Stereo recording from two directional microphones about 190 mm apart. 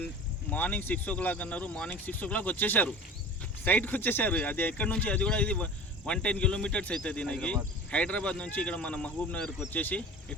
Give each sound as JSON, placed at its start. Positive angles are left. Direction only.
{"t": 0.5, "sound": "speech", "side_deg": 10}